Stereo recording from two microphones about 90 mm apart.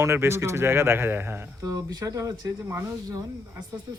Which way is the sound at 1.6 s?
40° right (ahead or behind).